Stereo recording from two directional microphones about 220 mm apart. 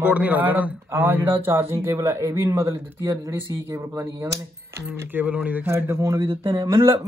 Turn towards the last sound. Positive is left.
turn(degrees=-10)  # may be behind; listen again after turning